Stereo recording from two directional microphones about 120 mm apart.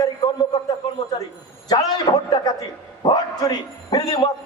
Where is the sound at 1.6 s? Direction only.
35° left (ahead or behind).